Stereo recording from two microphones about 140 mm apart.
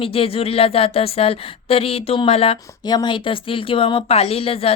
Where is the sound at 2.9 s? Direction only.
30° left (ahead or behind).